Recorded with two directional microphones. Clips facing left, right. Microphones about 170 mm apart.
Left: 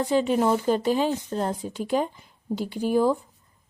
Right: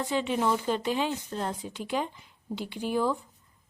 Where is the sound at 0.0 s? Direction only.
40° left (ahead or behind).